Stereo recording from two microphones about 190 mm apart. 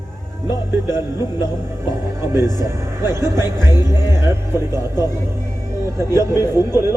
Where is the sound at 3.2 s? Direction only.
20° left (ahead or behind).